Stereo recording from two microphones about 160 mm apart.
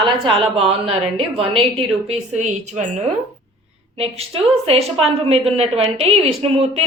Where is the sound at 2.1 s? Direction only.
50° right (ahead or behind).